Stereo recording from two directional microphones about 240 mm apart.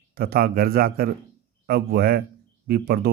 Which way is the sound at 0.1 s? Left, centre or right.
Right.